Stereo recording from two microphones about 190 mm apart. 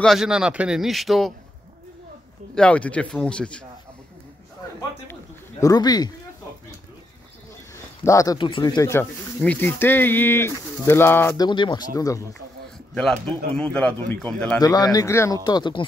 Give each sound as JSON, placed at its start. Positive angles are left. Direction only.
{"t": 0.0, "sound": "speech", "side_deg": 0}
{"t": 2.5, "sound": "speech", "side_deg": 5}
{"t": 5.6, "sound": "speech", "side_deg": 20}
{"t": 8.0, "sound": "speech", "side_deg": 15}
{"t": 11.4, "sound": "speech", "side_deg": 25}
{"t": 12.9, "sound": "speech", "side_deg": 5}
{"t": 14.6, "sound": "speech", "side_deg": 20}